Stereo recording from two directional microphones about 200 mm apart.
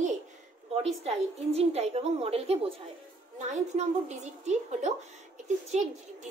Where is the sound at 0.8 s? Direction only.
30° right (ahead or behind).